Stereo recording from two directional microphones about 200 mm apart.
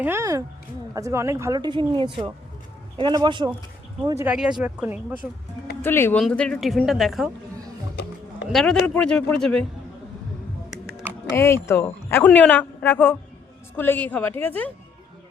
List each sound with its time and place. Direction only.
0.0 s speech: 15° right (ahead or behind)
4.4 s a woman's voice: 5° right (ahead or behind)
5.8 s a woman's voice: 10° left (ahead or behind)
8.4 s a woman's voice: centre (ahead or behind)
11.3 s speech: 15° left (ahead or behind)